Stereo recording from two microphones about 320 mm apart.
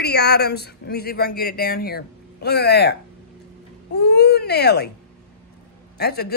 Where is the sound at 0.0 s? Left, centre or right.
Left.